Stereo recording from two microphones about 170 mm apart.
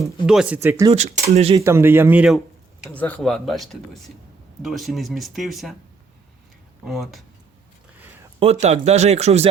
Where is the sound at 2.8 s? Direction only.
10° left (ahead or behind).